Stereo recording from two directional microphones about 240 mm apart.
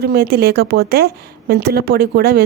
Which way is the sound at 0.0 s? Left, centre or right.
Right.